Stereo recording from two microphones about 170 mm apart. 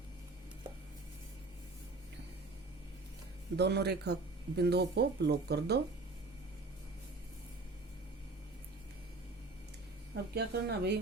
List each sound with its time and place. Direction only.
3.6 s speech: 75° right (ahead or behind)
10.3 s speech: 75° right (ahead or behind)